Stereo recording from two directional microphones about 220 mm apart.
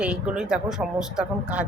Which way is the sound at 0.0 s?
5° right (ahead or behind).